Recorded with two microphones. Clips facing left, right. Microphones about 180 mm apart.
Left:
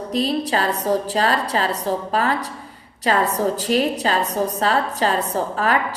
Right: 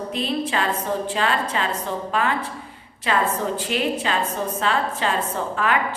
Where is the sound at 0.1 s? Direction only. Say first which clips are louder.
Left 5 dB; 35° left (ahead or behind).